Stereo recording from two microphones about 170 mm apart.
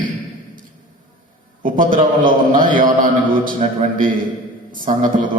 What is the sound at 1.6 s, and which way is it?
Speech, 50° right (ahead or behind).